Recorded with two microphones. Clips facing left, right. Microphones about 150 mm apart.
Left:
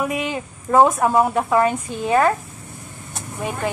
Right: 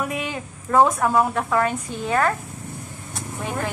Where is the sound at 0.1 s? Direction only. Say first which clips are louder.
Left 4 dB; 15° left (ahead or behind).